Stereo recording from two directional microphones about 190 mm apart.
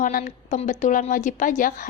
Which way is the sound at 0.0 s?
45° left (ahead or behind).